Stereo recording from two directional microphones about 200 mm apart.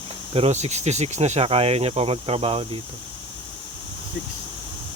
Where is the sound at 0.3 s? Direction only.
35° right (ahead or behind).